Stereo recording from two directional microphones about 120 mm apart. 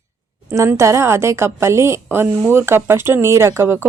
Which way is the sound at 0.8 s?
25° right (ahead or behind).